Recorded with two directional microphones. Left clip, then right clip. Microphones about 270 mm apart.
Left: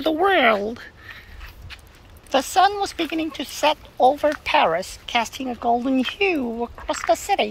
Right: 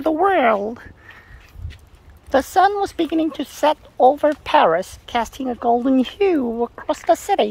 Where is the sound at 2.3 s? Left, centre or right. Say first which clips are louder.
Right 2 dB; right.